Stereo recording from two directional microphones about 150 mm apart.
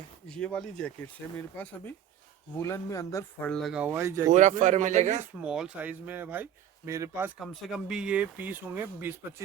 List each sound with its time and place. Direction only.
0.3 s speech: 5° left (ahead or behind)
3.5 s speech: centre (ahead or behind); by 4.3 s 20° right (ahead or behind)
4.3 s speech: 55° right (ahead or behind)
5.4 s speech: 5° right (ahead or behind)
7.3 s speech: centre (ahead or behind)